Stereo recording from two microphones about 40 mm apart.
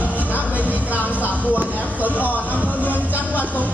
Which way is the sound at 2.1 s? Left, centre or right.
Left.